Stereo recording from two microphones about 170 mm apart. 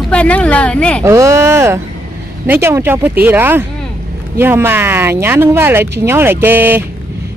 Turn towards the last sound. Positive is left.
turn(degrees=-10)  # may be behind; listen again after turning